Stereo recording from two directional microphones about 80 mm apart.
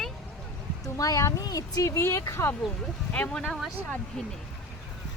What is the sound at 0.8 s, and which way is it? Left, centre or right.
Speech, left.